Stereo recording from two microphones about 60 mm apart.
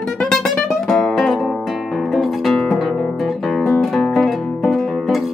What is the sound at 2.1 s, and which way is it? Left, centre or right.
Music, centre.